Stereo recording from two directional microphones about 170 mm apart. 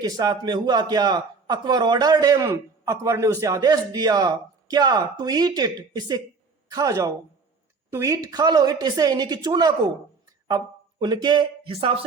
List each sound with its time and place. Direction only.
0.0 s a man's voice: 25° right (ahead or behind)
11.0 s a man's voice: 25° right (ahead or behind)